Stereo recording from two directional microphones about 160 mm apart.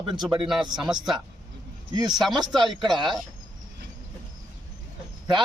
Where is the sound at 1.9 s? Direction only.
25° right (ahead or behind).